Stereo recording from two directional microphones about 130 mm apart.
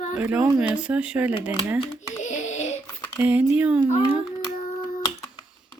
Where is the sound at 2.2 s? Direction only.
65° left (ahead or behind).